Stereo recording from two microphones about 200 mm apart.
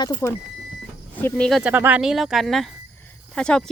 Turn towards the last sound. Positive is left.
turn(degrees=5)  # may be behind; listen again after turning